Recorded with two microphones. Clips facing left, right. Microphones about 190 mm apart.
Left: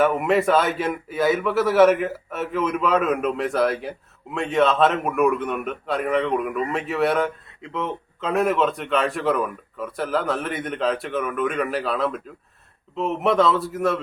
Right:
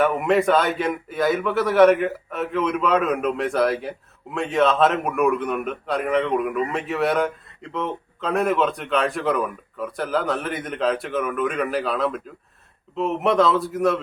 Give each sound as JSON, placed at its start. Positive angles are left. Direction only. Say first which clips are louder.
{"t": 0.0, "sound": "a man's voice", "louder": "even", "side_deg": 0}